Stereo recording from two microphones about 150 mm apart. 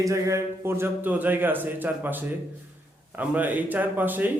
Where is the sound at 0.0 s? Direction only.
20° right (ahead or behind).